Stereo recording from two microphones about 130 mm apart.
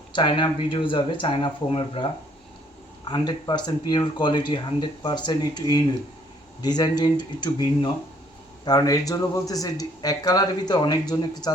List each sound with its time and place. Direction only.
0.1 s speech: 35° left (ahead or behind)